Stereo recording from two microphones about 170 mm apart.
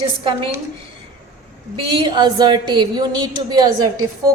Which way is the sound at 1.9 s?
25° right (ahead or behind).